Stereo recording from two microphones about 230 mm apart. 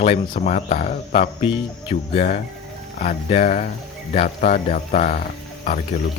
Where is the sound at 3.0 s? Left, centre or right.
Left.